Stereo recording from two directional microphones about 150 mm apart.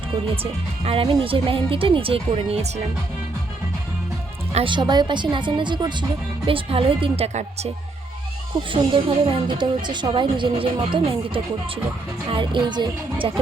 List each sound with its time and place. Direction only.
0.9 s speech: 35° right (ahead or behind)
4.5 s speech: 35° right (ahead or behind)
8.7 s speech: 35° right (ahead or behind)
12.3 s speech: 35° right (ahead or behind)